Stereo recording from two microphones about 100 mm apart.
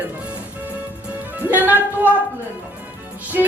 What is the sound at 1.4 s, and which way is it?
Speech, 20° right (ahead or behind).